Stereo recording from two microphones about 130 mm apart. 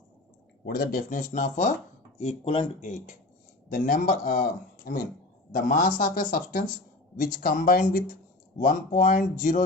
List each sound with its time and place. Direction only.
0.9 s speech: 90° left; by 1.7 s 65° left (ahead or behind)
2.1 s speech: 55° left (ahead or behind)
3.7 s speech: 90° left